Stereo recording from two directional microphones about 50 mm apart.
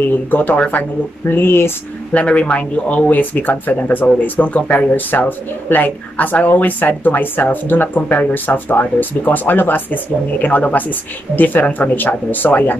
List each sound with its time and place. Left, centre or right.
0.3 s speech: left
1.3 s speech: left
2.1 s speech: left